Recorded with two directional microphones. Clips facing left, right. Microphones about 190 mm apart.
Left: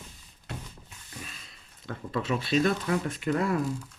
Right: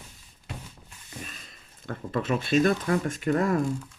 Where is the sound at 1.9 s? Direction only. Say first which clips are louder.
Right 2 dB; 50° right (ahead or behind).